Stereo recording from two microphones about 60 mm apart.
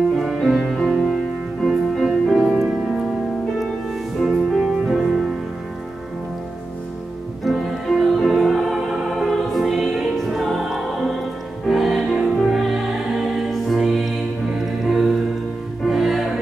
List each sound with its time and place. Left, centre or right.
0.1 s music: centre
4.2 s music: centre
7.4 s music: centre